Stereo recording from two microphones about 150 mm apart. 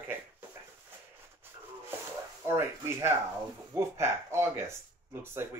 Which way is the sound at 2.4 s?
15° right (ahead or behind).